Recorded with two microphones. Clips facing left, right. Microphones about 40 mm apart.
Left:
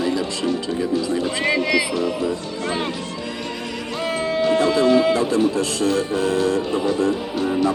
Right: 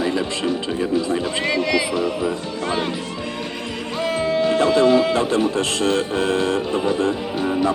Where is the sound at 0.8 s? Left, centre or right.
Right.